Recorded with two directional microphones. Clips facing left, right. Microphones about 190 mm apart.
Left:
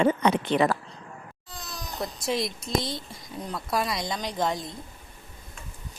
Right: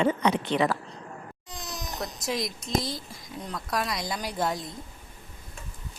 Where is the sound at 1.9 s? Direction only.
5° left (ahead or behind).